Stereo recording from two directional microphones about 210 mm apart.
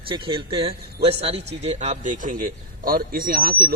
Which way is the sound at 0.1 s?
25° right (ahead or behind).